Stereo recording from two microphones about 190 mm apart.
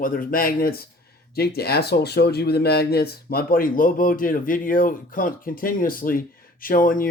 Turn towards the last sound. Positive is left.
turn(degrees=45)  # may be behind; listen again after turning